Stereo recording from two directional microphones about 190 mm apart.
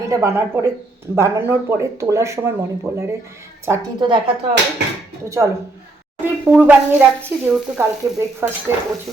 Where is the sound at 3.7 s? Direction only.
25° right (ahead or behind).